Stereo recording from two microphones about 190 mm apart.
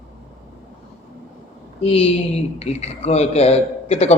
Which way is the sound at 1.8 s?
30° left (ahead or behind).